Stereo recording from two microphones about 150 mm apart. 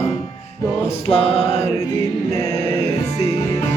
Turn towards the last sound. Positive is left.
turn(degrees=40)  # may be behind; listen again after turning